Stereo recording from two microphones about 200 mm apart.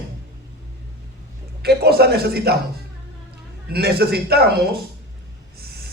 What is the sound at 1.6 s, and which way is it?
Speech, 50° right (ahead or behind).